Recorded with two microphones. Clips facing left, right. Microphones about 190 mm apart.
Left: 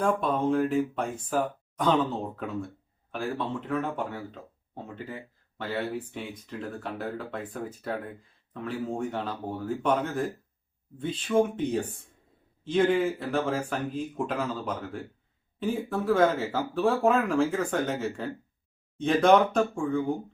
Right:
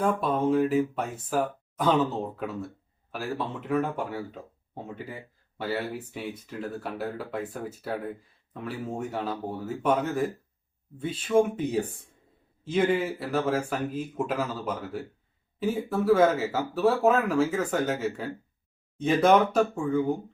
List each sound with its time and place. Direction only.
0.0 s speech: 5° right (ahead or behind)
3.1 s speech: 5° right (ahead or behind)